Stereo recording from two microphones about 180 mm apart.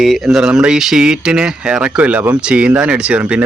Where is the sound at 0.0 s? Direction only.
Centre (ahead or behind).